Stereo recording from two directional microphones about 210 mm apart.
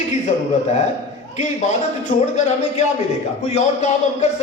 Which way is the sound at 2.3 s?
35° left (ahead or behind).